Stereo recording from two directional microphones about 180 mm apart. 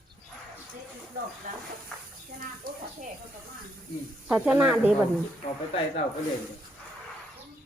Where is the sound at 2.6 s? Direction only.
55° right (ahead or behind).